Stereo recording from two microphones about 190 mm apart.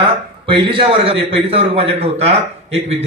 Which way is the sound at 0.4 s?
25° right (ahead or behind).